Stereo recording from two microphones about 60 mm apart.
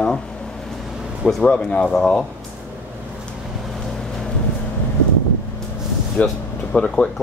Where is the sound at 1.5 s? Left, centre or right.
Centre.